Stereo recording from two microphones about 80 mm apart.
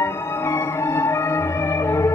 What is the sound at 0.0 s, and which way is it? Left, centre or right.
Music, left.